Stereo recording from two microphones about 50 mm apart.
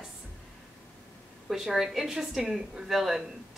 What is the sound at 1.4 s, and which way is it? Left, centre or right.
A woman's voice, centre.